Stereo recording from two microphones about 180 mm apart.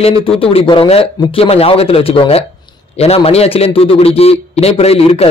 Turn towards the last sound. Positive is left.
turn(degrees=35)  # may be behind; listen again after turning